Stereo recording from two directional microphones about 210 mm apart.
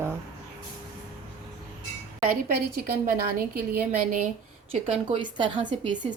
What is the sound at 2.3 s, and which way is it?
A woman's voice, 45° right (ahead or behind).